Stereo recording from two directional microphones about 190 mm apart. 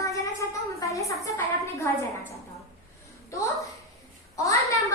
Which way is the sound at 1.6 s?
15° left (ahead or behind).